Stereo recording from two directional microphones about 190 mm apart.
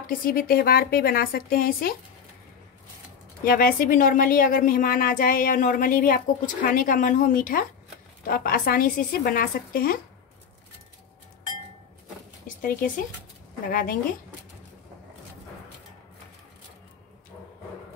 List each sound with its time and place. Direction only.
0.0 s speech: 50° left (ahead or behind)
3.4 s speech: 50° left (ahead or behind)
12.4 s speech: 45° left (ahead or behind)